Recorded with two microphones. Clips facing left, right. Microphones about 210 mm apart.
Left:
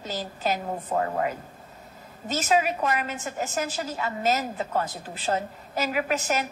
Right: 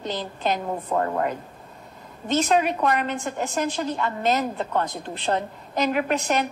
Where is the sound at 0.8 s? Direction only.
50° right (ahead or behind).